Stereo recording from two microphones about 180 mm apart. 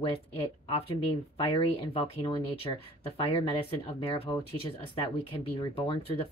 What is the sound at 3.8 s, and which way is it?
Speech, 30° left (ahead or behind).